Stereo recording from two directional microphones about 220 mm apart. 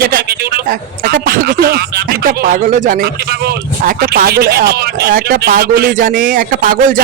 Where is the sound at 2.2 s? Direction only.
40° right (ahead or behind).